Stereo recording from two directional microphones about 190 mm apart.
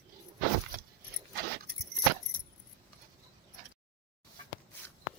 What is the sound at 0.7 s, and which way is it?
Keys jangling, 45° right (ahead or behind).